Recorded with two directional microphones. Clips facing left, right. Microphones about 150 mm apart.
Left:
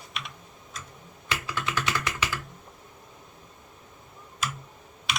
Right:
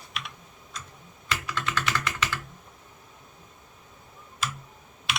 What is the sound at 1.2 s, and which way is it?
Typing, 15° left (ahead or behind).